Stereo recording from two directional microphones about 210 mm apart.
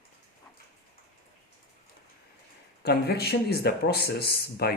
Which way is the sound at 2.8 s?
50° left (ahead or behind).